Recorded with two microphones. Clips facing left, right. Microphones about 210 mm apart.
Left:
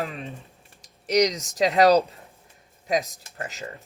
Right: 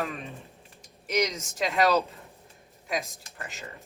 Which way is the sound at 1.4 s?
40° left (ahead or behind).